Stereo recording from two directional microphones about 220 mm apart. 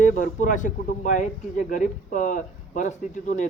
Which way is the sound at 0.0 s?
35° left (ahead or behind).